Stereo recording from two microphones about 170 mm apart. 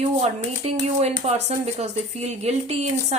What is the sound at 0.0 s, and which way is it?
Speech, 35° right (ahead or behind).